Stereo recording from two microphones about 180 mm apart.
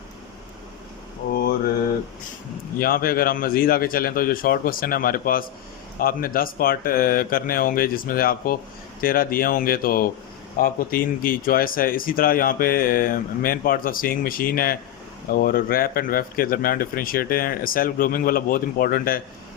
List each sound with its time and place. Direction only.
1.3 s mantra: 55° left (ahead or behind)
2.7 s speech: 55° left (ahead or behind)